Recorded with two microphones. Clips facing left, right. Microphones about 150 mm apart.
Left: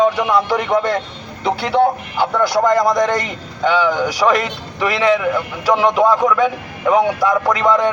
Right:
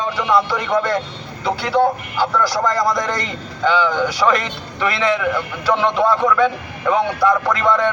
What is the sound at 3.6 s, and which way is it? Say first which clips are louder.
A man's voice: left 1 dB; 10° left (ahead or behind).